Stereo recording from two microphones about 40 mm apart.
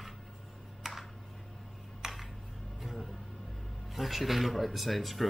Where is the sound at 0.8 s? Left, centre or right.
Centre.